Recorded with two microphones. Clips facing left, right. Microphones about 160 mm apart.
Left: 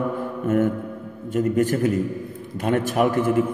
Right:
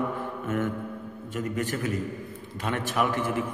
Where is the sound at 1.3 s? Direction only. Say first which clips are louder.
Left 10 dB; 45° left (ahead or behind).